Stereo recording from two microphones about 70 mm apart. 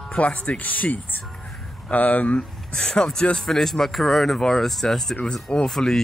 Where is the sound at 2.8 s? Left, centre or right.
Centre.